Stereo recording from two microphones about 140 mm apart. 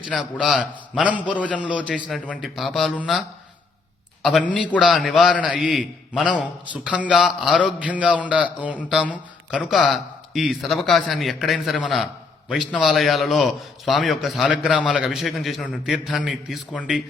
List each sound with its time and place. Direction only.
0.1 s a man's voice: 5° right (ahead or behind)
4.2 s a man's voice: centre (ahead or behind)